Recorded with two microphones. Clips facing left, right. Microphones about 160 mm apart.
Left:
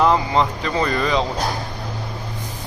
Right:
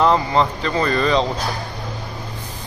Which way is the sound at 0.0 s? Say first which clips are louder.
Right 1 dB; 10° left (ahead or behind).